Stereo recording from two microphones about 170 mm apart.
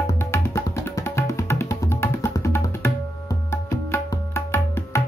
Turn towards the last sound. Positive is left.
turn(degrees=15)  # may be behind; listen again after turning